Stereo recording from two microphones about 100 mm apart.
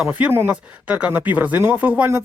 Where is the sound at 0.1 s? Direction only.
15° right (ahead or behind).